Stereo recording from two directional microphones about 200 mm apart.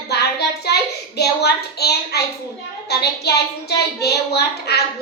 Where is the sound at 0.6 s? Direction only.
55° left (ahead or behind).